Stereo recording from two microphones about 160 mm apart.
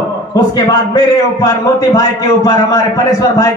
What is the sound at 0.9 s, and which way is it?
A man's voice, 25° left (ahead or behind).